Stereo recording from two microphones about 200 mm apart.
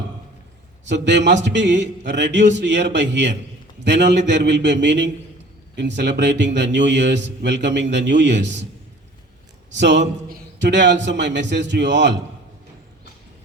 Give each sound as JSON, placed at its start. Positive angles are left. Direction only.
{"t": 0.9, "sound": "a man's voice", "side_deg": -60}
{"t": 9.7, "sound": "a man's voice", "side_deg": -60}